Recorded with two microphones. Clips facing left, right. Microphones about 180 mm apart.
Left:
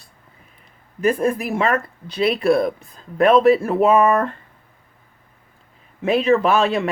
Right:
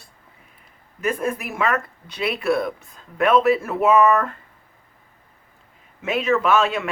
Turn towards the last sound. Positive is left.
turn(degrees=35)  # may be behind; listen again after turning